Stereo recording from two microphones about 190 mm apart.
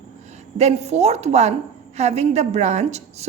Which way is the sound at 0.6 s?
35° right (ahead or behind).